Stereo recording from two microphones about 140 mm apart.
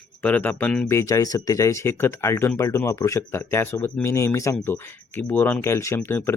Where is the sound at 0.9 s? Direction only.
25° left (ahead or behind).